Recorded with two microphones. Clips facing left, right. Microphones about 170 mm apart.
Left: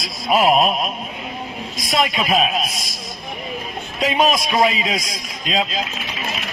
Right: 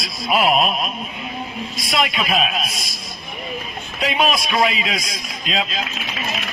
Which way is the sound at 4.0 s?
40° left (ahead or behind).